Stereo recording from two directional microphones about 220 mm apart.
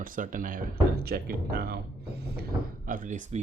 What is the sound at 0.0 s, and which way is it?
Speech, 40° right (ahead or behind).